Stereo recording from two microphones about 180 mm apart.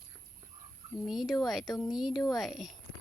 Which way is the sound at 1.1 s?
Centre (ahead or behind).